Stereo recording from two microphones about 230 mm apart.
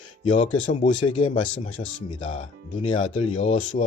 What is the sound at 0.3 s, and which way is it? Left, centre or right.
Speech, left.